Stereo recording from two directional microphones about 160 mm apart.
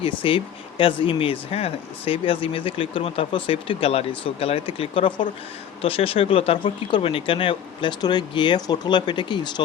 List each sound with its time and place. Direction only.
0.0 s speech: 35° left (ahead or behind)